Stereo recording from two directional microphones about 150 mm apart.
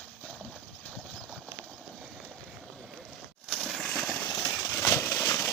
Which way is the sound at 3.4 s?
5° left (ahead or behind).